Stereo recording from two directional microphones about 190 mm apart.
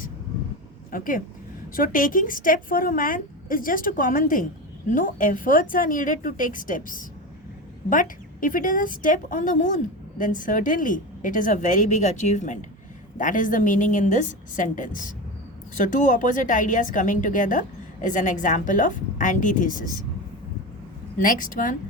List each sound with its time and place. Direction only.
0.9 s a woman's voice: 45° left (ahead or behind)
21.2 s a woman's voice: 45° left (ahead or behind)